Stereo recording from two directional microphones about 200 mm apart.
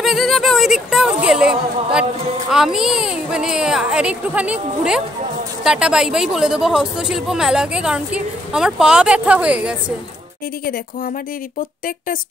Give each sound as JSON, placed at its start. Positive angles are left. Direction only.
{"t": 0.0, "sound": "speech", "side_deg": 0}